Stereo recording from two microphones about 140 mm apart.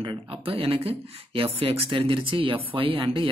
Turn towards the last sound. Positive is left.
turn(degrees=-40)  # may be behind; listen again after turning